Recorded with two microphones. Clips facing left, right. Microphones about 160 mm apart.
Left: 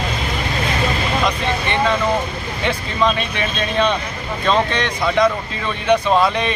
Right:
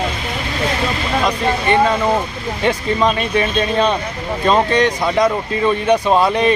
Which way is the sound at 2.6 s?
40° right (ahead or behind).